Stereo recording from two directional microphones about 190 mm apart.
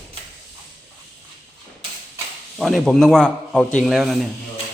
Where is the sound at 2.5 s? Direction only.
Centre (ahead or behind).